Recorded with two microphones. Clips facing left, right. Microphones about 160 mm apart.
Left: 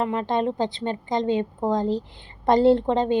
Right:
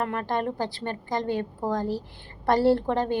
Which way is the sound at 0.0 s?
20° left (ahead or behind).